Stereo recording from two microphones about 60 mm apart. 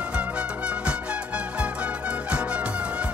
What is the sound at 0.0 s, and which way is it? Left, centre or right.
Music, right.